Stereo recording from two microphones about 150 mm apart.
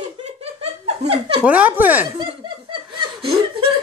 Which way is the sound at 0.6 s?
40° right (ahead or behind).